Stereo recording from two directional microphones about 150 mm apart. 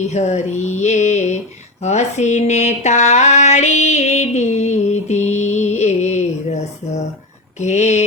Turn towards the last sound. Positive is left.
turn(degrees=50)  # may be behind; listen again after turning